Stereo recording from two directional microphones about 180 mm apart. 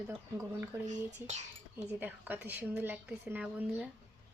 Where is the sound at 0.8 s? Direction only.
40° right (ahead or behind).